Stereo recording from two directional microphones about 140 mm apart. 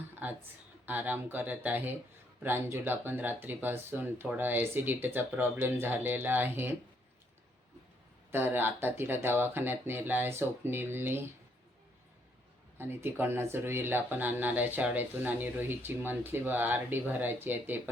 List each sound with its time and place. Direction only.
0.2 s speech: 10° right (ahead or behind)
8.3 s speech: 15° right (ahead or behind)
12.7 s speech: 15° right (ahead or behind)